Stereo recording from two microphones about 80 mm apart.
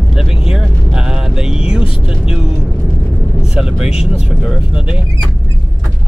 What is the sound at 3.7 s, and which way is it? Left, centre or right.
Speech, centre.